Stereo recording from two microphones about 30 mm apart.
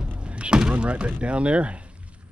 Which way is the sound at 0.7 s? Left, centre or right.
Right.